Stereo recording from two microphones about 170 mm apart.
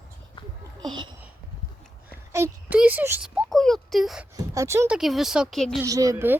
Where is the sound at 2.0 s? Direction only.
15° right (ahead or behind).